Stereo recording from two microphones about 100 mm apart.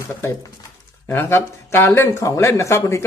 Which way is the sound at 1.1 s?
25° left (ahead or behind).